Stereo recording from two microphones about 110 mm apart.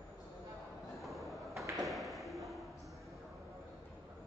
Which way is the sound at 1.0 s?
Centre (ahead or behind).